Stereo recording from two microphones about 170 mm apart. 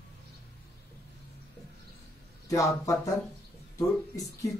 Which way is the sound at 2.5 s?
20° left (ahead or behind).